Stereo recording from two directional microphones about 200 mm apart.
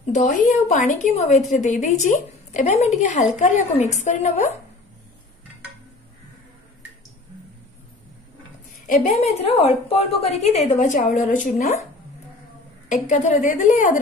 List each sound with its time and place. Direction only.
0.1 s a woman's voice: 35° left (ahead or behind)
8.8 s a woman's voice: 35° left (ahead or behind)
12.8 s a woman's voice: 40° left (ahead or behind)